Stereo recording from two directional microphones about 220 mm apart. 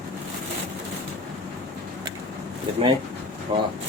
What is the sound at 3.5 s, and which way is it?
Speech, 25° right (ahead or behind).